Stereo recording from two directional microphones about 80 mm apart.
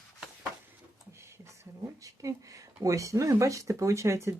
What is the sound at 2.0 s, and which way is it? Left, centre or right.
Speech, right.